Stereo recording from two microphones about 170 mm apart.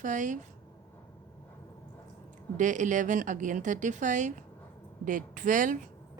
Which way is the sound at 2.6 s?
45° right (ahead or behind).